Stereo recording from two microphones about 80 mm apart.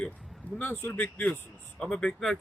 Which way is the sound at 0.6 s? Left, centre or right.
Left.